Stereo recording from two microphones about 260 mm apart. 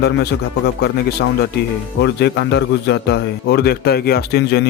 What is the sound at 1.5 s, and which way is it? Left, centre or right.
A man's voice, left.